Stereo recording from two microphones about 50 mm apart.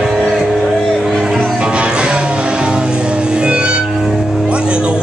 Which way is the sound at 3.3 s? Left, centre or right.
Centre.